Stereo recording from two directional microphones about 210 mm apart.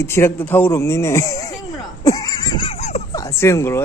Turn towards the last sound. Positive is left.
turn(degrees=15)  # may be behind; listen again after turning